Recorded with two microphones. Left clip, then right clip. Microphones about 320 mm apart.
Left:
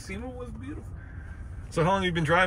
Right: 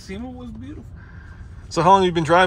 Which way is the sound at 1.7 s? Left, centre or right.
Centre.